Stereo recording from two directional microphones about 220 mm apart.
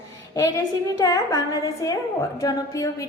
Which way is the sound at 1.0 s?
15° left (ahead or behind).